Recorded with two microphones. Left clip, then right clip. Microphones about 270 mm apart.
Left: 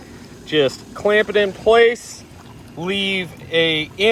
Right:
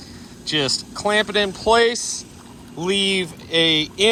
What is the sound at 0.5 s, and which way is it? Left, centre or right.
Speech, centre.